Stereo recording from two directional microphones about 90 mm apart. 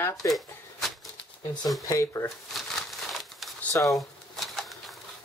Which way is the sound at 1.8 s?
35° left (ahead or behind).